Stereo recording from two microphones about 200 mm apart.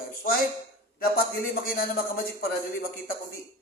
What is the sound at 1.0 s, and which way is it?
Speech, 50° left (ahead or behind).